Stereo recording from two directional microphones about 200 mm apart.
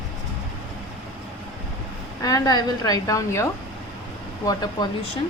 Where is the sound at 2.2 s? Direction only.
20° left (ahead or behind).